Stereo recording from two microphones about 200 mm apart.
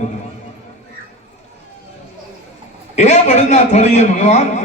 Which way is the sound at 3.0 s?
35° left (ahead or behind).